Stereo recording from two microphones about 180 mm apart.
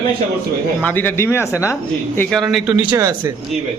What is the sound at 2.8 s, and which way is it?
Speech, 20° right (ahead or behind).